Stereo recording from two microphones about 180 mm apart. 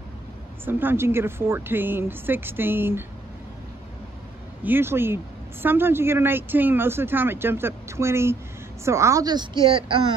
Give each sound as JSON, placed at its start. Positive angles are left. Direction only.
{"t": 0.7, "sound": "speech", "side_deg": -10}
{"t": 4.6, "sound": "a woman's voice", "side_deg": -10}